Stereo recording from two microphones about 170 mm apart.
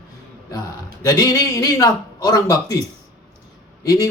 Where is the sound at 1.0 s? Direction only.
20° left (ahead or behind).